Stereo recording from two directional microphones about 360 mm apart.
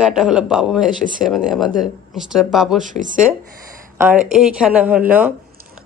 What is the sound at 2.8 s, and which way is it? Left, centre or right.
Speech, right.